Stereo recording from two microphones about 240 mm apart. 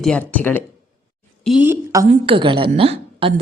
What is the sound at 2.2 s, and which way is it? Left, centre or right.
A woman's voice, right.